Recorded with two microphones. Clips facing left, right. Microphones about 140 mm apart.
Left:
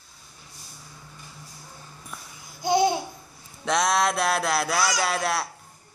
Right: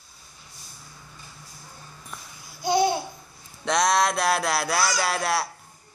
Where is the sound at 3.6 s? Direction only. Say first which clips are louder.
Right 1 dB; centre (ahead or behind).